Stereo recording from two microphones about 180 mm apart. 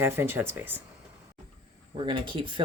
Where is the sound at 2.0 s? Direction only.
30° right (ahead or behind).